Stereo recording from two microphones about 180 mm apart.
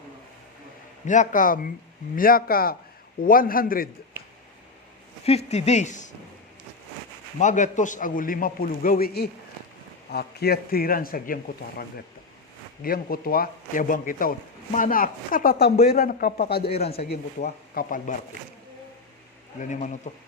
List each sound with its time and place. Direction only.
1.0 s a man's voice: 45° left (ahead or behind)
5.2 s speech: 35° left (ahead or behind)
7.3 s a man's voice: 45° left (ahead or behind); by 16.6 s 60° left (ahead or behind)
16.6 s speech: 35° left (ahead or behind)
17.1 s a man's voice: 55° left (ahead or behind)
19.5 s a man's voice: 45° left (ahead or behind)